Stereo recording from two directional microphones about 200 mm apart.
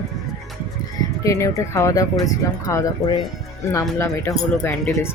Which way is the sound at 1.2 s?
15° left (ahead or behind).